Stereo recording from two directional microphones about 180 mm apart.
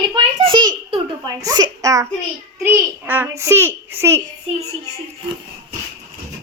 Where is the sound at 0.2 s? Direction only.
30° right (ahead or behind).